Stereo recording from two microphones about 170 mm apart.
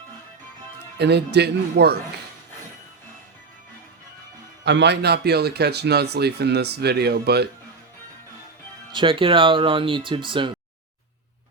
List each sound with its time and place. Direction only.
0.9 s speech: 80° right
4.6 s speech: 90° right; by 7.4 s 70° right (ahead or behind)
8.9 s speech: 30° right (ahead or behind)